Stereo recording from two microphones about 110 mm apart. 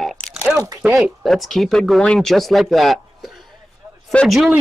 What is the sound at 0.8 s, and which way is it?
Speech, 10° right (ahead or behind).